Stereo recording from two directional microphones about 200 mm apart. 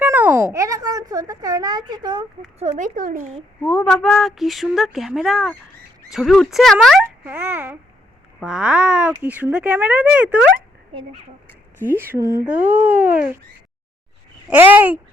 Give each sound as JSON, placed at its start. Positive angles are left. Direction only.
{"t": 0.0, "sound": "a child's voice", "side_deg": -10}
{"t": 3.6, "sound": "a woman's voice", "side_deg": 5}
{"t": 11.8, "sound": "speech", "side_deg": -10}
{"t": 14.5, "sound": "speech", "side_deg": -10}